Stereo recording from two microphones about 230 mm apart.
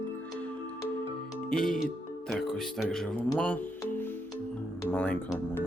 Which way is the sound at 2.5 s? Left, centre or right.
Centre.